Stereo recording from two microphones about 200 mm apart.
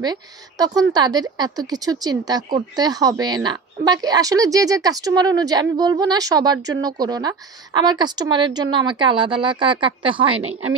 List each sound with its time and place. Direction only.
0.0 s speech: 20° right (ahead or behind)